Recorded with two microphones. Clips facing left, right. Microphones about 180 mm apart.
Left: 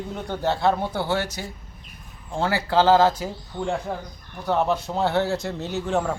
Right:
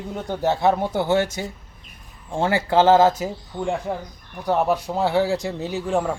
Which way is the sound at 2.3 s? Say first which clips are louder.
Right 3 dB; 20° right (ahead or behind).